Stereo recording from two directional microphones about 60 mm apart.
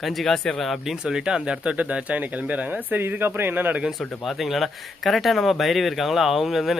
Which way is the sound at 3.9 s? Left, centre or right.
Centre.